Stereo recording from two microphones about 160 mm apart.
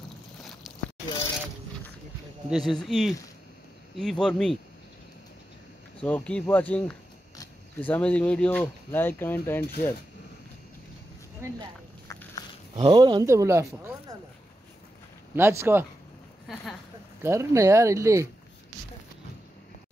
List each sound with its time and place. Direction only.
0.7 s a sound: centre (ahead or behind)
2.5 s speech: centre (ahead or behind)
5.9 s speech: 10° left (ahead or behind)
11.4 s speech: 15° right (ahead or behind)
12.7 s speech: 30° right (ahead or behind)
15.3 s speech: 15° right (ahead or behind)
17.2 s speech: 15° right (ahead or behind)